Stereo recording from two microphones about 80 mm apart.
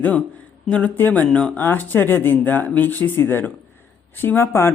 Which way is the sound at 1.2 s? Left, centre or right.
Centre.